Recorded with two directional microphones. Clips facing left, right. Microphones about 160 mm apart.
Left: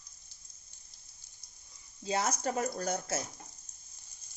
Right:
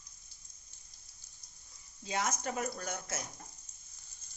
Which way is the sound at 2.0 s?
30° left (ahead or behind).